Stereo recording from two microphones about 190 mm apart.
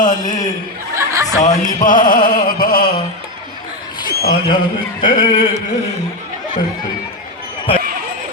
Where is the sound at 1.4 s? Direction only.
45° left (ahead or behind).